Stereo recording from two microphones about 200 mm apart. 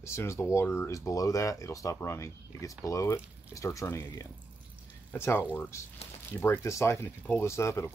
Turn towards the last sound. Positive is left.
turn(degrees=15)  # may be behind; listen again after turning